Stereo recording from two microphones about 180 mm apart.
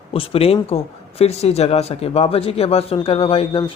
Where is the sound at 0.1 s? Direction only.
30° left (ahead or behind).